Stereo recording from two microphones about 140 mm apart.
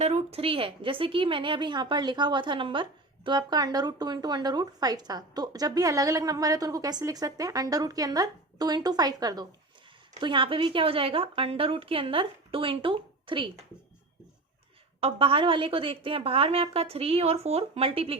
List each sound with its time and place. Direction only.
0.0 s a woman's voice: 50° right (ahead or behind)
15.0 s a woman's voice: 40° right (ahead or behind)